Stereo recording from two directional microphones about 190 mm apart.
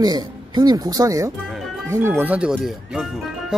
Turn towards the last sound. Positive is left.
turn(degrees=0)  # may be behind; listen again after turning